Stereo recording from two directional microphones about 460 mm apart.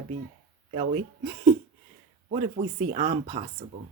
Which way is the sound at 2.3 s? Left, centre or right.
Centre.